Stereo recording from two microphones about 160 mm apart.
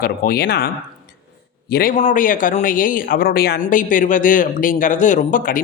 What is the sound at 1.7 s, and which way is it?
Speech, 70° left (ahead or behind).